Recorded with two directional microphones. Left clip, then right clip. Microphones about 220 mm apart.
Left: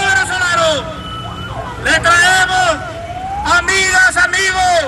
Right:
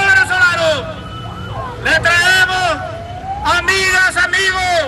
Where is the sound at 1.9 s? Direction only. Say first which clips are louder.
Left 1 dB; 15° right (ahead or behind).